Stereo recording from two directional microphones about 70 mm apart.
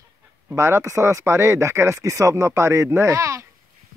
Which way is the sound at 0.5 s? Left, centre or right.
Right.